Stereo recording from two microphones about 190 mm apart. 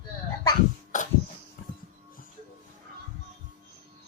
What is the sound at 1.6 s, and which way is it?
Music, 45° left (ahead or behind).